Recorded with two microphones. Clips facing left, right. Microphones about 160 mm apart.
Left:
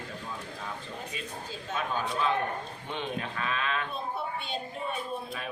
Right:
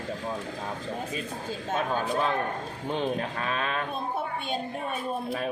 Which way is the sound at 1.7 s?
45° right (ahead or behind).